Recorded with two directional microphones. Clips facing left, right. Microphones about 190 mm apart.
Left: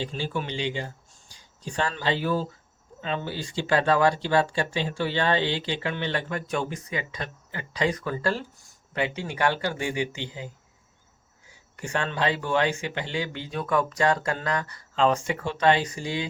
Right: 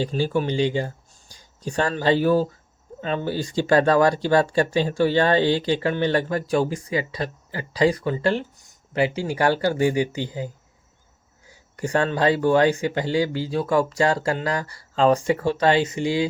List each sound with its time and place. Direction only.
0.0 s speech: 40° right (ahead or behind)
11.8 s speech: 40° right (ahead or behind)